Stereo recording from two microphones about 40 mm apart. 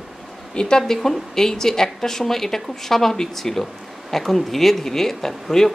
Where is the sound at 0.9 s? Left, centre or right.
Centre.